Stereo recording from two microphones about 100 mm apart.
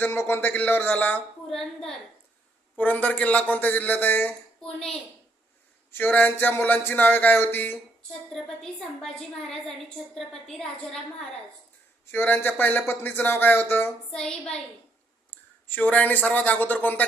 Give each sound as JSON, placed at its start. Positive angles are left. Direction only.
{"t": 0.0, "sound": "a sound", "side_deg": 20}
{"t": 1.5, "sound": "a woman's voice", "side_deg": 5}
{"t": 2.7, "sound": "speech", "side_deg": 15}
{"t": 4.6, "sound": "speech", "side_deg": 5}
{"t": 5.9, "sound": "a sound", "side_deg": 15}
{"t": 8.3, "sound": "a woman's voice", "side_deg": 5}
{"t": 12.1, "sound": "a sound", "side_deg": 20}
{"t": 14.1, "sound": "speech", "side_deg": 5}
{"t": 15.3, "sound": "speech", "side_deg": 15}